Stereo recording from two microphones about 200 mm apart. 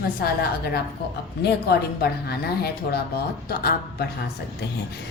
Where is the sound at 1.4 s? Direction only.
55° left (ahead or behind).